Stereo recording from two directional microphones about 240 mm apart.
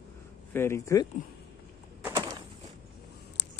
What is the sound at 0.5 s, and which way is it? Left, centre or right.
Speech, centre.